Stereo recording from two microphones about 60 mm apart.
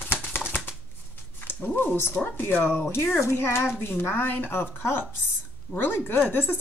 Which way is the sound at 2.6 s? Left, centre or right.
Left.